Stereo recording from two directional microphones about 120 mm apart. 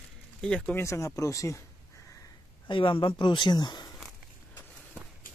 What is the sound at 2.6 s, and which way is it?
Speech, 45° left (ahead or behind).